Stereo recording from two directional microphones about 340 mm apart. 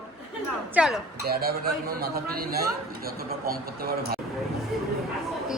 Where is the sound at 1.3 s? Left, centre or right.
Right.